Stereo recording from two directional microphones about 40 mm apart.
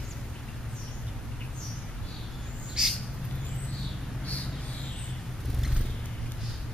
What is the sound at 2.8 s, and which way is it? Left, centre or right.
Bird, centre.